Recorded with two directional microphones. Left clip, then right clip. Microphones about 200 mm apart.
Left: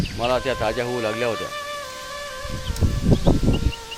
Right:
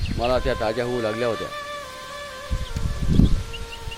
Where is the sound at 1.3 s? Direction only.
25° left (ahead or behind).